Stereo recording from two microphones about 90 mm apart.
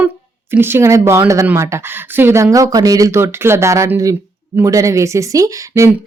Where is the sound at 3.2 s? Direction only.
30° right (ahead or behind).